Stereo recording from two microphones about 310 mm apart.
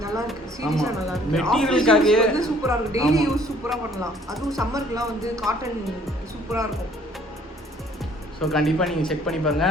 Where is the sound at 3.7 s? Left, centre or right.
Centre.